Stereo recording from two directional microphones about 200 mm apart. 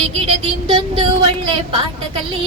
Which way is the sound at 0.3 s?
25° right (ahead or behind).